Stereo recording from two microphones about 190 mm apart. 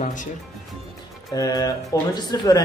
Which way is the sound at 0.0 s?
40° left (ahead or behind).